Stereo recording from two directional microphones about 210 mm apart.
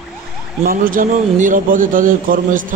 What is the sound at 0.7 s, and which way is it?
A man's voice, 40° right (ahead or behind).